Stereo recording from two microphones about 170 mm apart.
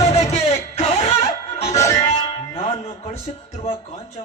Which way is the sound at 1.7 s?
15° left (ahead or behind).